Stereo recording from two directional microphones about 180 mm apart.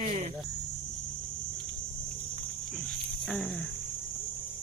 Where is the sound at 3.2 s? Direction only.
Centre (ahead or behind).